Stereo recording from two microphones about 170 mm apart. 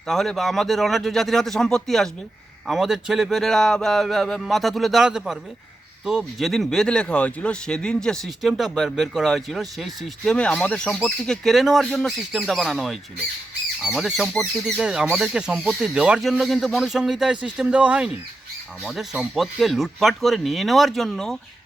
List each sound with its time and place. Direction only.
0.1 s speech: centre (ahead or behind)